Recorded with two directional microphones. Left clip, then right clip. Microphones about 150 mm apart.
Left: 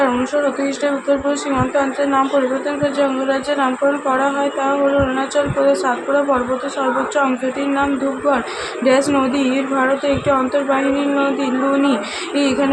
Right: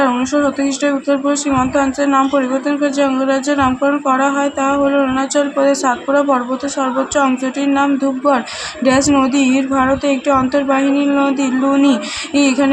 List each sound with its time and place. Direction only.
0.9 s a woman's voice: 20° right (ahead or behind)
8.8 s a woman's voice: 15° right (ahead or behind)